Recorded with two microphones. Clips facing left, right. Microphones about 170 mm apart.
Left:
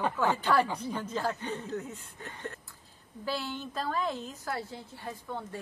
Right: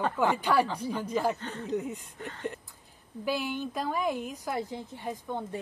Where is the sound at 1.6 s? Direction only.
15° right (ahead or behind).